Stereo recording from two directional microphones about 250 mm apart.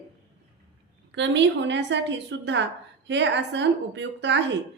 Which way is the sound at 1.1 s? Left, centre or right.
Right.